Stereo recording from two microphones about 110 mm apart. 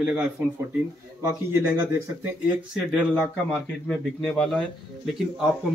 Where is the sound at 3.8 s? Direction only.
5° left (ahead or behind).